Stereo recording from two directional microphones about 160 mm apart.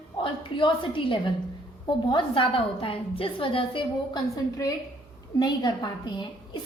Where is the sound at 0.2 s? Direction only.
30° left (ahead or behind).